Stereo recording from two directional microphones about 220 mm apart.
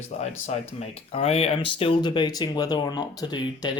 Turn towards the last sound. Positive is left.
turn(degrees=20)  # may be behind; listen again after turning